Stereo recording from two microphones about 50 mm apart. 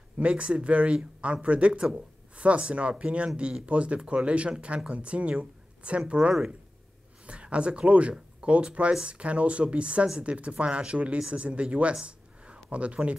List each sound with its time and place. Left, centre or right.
0.2 s speech: right
11.9 s a sound: centre
12.6 s speech: right